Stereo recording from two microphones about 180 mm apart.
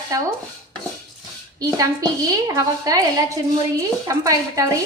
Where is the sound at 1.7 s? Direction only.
20° right (ahead or behind).